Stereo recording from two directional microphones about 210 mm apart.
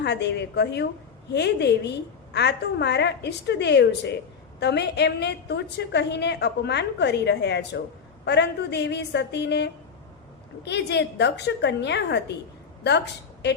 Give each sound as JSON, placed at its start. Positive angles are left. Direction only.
{"t": 0.0, "sound": "a woman's voice", "side_deg": 55}